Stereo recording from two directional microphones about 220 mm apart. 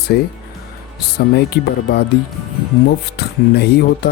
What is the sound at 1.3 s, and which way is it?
Speech, 45° left (ahead or behind).